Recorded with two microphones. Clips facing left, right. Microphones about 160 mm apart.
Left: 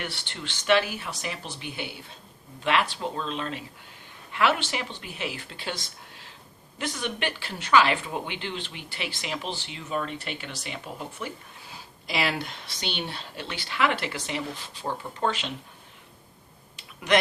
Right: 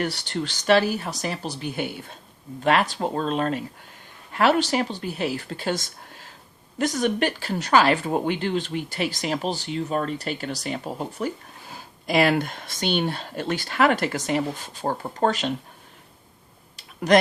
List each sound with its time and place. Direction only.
0.0 s speech: 40° right (ahead or behind)
16.7 s clicking: 40° right (ahead or behind)